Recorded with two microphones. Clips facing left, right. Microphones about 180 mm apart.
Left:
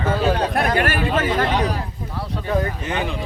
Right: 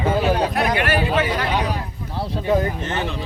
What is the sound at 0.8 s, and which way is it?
Speech, 45° left (ahead or behind).